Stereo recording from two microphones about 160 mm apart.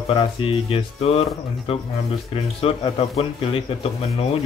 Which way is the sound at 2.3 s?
35° left (ahead or behind).